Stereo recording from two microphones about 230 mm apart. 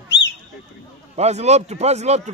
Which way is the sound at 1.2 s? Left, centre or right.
Right.